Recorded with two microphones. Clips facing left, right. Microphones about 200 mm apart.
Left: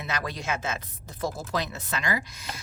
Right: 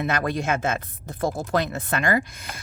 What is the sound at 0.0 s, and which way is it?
Speech, 55° right (ahead or behind).